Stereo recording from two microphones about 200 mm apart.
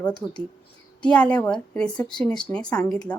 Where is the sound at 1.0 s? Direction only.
5° left (ahead or behind).